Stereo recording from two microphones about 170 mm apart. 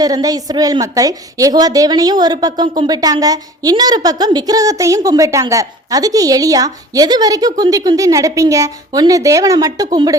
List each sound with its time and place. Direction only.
0.0 s a woman's voice: 20° right (ahead or behind)